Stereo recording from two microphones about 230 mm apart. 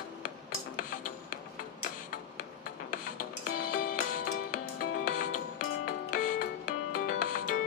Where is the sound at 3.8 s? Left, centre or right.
Left.